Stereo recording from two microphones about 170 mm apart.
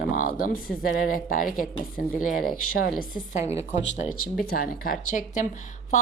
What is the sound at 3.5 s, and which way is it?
Speech, 45° left (ahead or behind).